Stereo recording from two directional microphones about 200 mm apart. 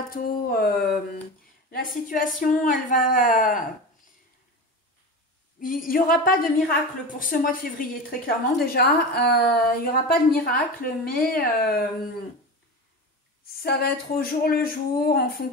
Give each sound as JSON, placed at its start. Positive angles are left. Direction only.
{"t": 0.1, "sound": "a woman's voice", "side_deg": 45}
{"t": 5.6, "sound": "a woman's voice", "side_deg": 45}
{"t": 13.6, "sound": "a woman's voice", "side_deg": 50}